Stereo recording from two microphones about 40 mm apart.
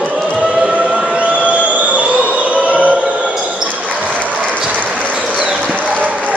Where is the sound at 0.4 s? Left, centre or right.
Centre.